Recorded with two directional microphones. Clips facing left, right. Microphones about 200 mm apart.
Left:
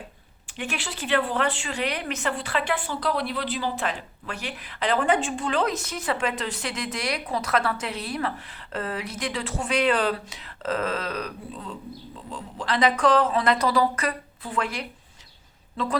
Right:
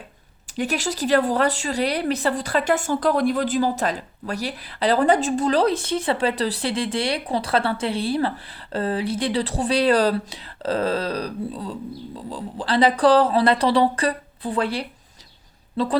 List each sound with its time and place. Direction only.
0.5 s a woman's voice: 40° right (ahead or behind)